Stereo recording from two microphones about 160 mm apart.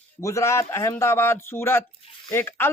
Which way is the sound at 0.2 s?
20° left (ahead or behind).